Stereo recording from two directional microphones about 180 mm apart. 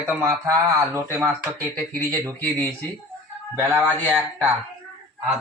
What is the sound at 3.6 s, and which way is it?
Speech, 15° right (ahead or behind).